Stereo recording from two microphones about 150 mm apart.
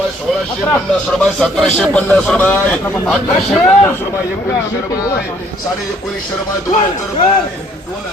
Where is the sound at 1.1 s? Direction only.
5° left (ahead or behind).